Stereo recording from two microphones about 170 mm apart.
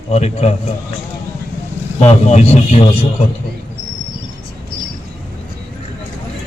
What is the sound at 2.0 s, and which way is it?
A man's voice, 40° left (ahead or behind).